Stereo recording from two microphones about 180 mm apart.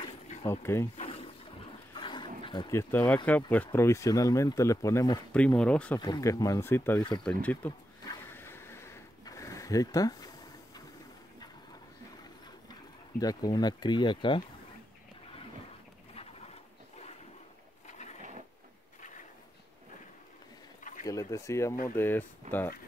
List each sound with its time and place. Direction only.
0.5 s speech: 15° left (ahead or behind)
0.9 s boat: 35° left (ahead or behind)
2.0 s dog: 25° left (ahead or behind)
2.7 s speech: 15° left (ahead or behind)
5.3 s speech: 5° left (ahead or behind)
5.9 s speech: 20° left (ahead or behind)
8.0 s a sound: 15° left (ahead or behind)
13.2 s speech: 20° left (ahead or behind)
17.8 s a sound: 40° left (ahead or behind)
21.0 s speech: 20° left (ahead or behind)